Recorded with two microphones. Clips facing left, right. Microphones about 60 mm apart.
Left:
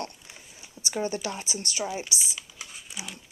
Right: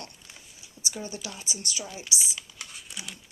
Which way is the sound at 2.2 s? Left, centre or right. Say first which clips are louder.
Even; centre.